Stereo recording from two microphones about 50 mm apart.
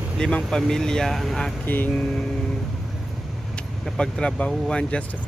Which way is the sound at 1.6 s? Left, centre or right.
Left.